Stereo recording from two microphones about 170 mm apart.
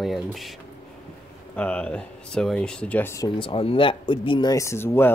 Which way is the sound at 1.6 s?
5° left (ahead or behind).